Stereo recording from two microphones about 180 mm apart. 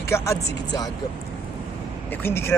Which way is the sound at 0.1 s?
15° left (ahead or behind).